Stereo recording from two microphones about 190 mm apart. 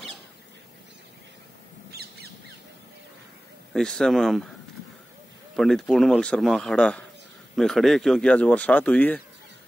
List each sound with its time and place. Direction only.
1.9 s a sound: 55° right (ahead or behind)
3.7 s speech: 5° left (ahead or behind)
5.6 s speech: centre (ahead or behind)